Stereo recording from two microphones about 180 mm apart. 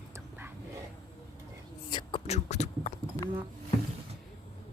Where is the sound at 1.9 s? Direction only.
30° left (ahead or behind).